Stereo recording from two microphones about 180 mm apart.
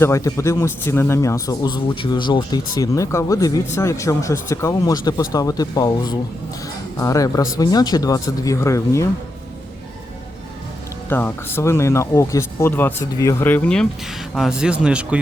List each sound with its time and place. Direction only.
0.0 s a man's voice: 15° left (ahead or behind)
11.1 s a man's voice: 10° left (ahead or behind)
14.3 s speech: 5° right (ahead or behind)